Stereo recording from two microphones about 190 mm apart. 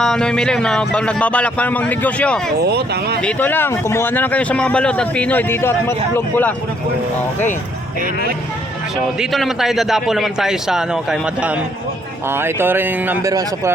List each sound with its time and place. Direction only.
0.0 s speech: 5° left (ahead or behind)
2.6 s speech: 60° right (ahead or behind)
3.2 s a man's voice: 5° left (ahead or behind)
9.2 s speech: centre (ahead or behind)